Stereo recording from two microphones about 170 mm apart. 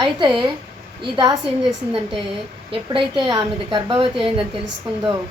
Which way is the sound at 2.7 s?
30° right (ahead or behind).